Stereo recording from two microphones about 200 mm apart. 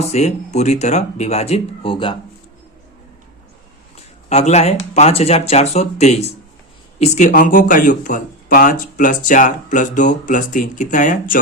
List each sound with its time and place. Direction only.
0.1 s speech: 35° left (ahead or behind)
3.9 s speech: 35° left (ahead or behind)